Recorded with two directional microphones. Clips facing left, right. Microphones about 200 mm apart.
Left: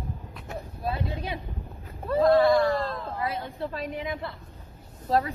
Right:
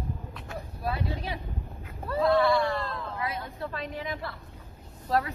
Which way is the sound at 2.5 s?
40° left (ahead or behind).